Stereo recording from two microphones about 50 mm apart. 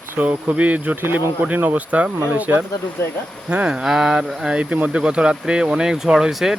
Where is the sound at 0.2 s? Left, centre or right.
Right.